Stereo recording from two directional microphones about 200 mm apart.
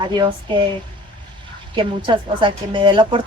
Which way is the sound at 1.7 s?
25° right (ahead or behind).